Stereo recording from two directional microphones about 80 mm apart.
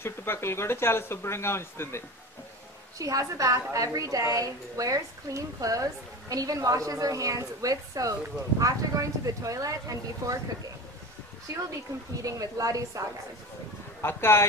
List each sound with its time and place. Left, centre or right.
0.0 s speech: left
3.0 s a woman's voice: right
12.3 s a woman's voice: right
14.0 s speech: left